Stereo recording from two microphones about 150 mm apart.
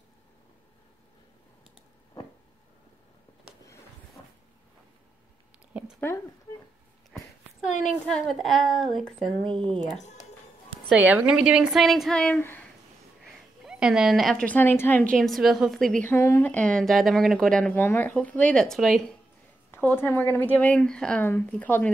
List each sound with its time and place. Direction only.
5.7 s a sound: 10° right (ahead or behind)
5.9 s speech: 15° left (ahead or behind)
7.6 s a woman's voice: 55° left (ahead or behind)
8.3 s a woman's voice: centre (ahead or behind)
9.4 s speech: 35° right (ahead or behind)
10.9 s a woman's voice: 10° right (ahead or behind); by 12.6 s 10° left (ahead or behind)
13.3 s a woman's voice: 5° right (ahead or behind); by 15.0 s 10° left (ahead or behind)
15.1 s a woman's voice: centre (ahead or behind)
19.7 s speech: 15° left (ahead or behind)